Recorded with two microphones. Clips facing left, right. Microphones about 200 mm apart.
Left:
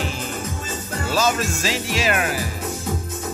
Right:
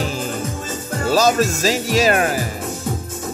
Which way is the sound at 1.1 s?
40° right (ahead or behind).